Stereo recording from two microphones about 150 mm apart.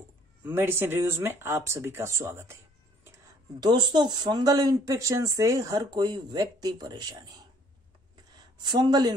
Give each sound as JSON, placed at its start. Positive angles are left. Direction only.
{"t": 0.4, "sound": "speech", "side_deg": -15}
{"t": 3.6, "sound": "speech", "side_deg": -30}
{"t": 8.6, "sound": "speech", "side_deg": -30}